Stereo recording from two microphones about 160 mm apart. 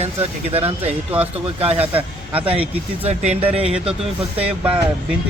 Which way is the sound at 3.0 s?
45° right (ahead or behind).